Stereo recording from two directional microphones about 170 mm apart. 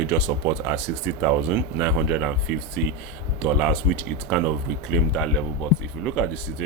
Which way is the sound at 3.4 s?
5° right (ahead or behind).